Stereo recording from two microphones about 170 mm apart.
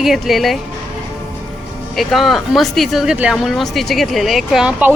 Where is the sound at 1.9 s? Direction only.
Centre (ahead or behind).